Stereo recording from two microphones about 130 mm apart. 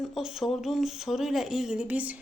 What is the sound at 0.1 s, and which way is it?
A woman's voice, 5° right (ahead or behind).